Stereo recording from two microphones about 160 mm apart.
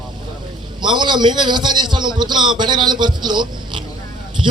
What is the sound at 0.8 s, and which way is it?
A man's voice, 30° right (ahead or behind).